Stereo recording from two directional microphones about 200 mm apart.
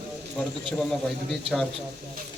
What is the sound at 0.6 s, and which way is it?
A man's voice, 5° left (ahead or behind).